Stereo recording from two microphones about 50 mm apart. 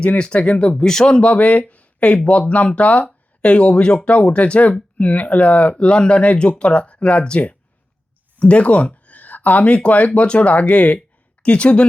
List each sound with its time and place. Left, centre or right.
0.0 s speech: left
0.8 s speech: centre
1.3 s speech: left